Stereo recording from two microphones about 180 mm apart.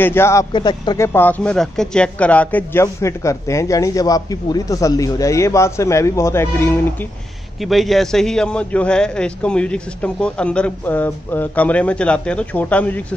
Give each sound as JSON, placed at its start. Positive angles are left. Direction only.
{"t": 0.0, "sound": "a man's voice", "side_deg": 15}
{"t": 7.6, "sound": "a man's voice", "side_deg": 0}